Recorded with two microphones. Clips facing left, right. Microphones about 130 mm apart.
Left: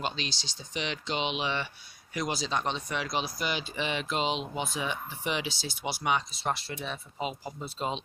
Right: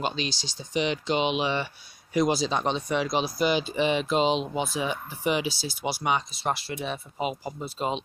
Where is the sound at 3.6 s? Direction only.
35° right (ahead or behind).